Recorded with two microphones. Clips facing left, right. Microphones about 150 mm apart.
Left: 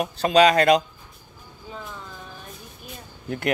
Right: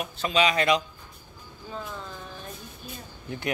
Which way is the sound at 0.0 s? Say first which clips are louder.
Left 7 dB; 40° left (ahead or behind).